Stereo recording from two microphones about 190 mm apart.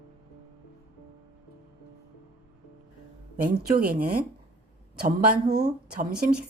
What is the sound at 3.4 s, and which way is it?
Speech, 55° right (ahead or behind).